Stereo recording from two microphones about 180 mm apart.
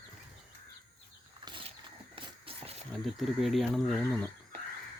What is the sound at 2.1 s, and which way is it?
Shuffle, 30° right (ahead or behind).